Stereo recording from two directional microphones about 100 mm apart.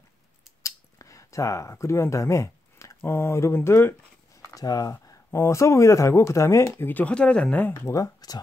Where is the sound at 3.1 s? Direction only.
25° left (ahead or behind).